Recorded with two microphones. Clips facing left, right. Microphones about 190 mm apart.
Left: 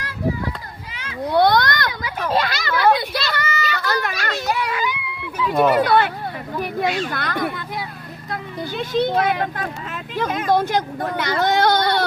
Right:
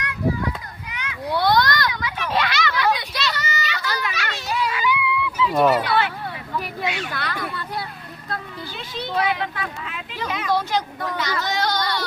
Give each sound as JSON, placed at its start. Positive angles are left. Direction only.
{"t": 1.3, "sound": "children playing", "side_deg": 55}
{"t": 2.0, "sound": "children playing", "side_deg": 40}
{"t": 3.3, "sound": "children playing", "side_deg": 55}
{"t": 4.4, "sound": "a sound", "side_deg": 60}
{"t": 5.5, "sound": "speech", "side_deg": -5}
{"t": 5.7, "sound": "speech", "side_deg": 50}
{"t": 6.5, "sound": "a sound", "side_deg": 45}
{"t": 8.7, "sound": "speech", "side_deg": 50}